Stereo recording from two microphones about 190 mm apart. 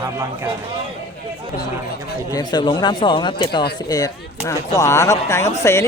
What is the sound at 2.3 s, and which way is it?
Speech, 20° left (ahead or behind).